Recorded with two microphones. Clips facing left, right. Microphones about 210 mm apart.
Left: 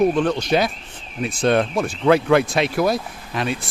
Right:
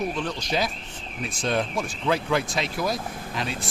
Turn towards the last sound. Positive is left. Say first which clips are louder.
# left 5 dB
turn(degrees=60)  # may be behind; listen again after turning